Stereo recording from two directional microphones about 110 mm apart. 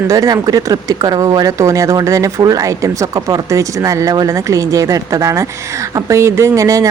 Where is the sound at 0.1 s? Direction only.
35° right (ahead or behind).